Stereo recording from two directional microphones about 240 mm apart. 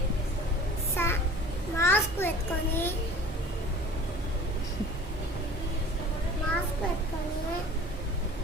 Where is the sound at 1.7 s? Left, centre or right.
Centre.